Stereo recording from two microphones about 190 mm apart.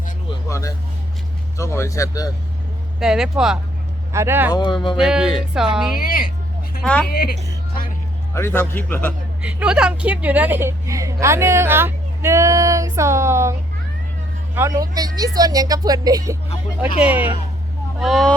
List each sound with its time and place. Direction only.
0.4 s a sound: 15° left (ahead or behind)
1.5 s speech: 15° left (ahead or behind)
3.0 s a woman's voice: 5° right (ahead or behind)
4.5 s speech: 25° left (ahead or behind)
4.9 s speech: 5° right (ahead or behind)
7.1 s speech: 55° left (ahead or behind)
8.3 s speech: 10° left (ahead or behind)
9.4 s a woman's voice: 5° right (ahead or behind)